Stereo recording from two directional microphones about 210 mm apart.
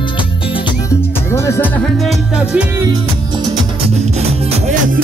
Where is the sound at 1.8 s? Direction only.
Centre (ahead or behind).